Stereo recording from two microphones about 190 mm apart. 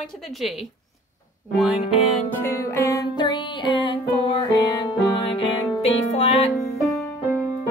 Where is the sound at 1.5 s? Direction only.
Centre (ahead or behind).